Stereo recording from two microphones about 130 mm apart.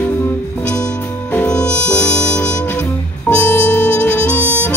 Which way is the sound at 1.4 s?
10° left (ahead or behind).